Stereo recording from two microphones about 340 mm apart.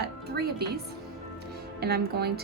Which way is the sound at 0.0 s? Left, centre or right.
Right.